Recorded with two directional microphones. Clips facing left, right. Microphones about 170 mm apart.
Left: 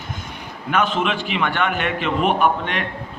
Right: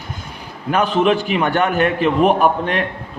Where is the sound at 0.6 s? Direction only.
35° right (ahead or behind).